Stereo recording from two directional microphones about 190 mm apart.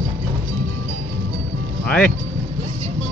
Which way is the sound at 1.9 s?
5° left (ahead or behind).